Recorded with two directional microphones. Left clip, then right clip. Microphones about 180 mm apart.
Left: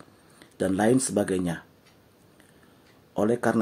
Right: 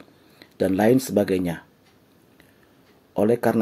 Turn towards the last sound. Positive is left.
turn(degrees=-25)  # may be behind; listen again after turning